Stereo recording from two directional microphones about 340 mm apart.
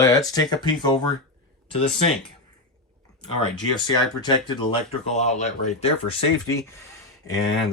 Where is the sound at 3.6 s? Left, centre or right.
Centre.